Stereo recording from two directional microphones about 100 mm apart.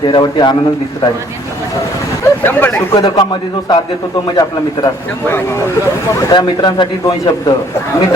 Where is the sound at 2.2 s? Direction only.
20° left (ahead or behind).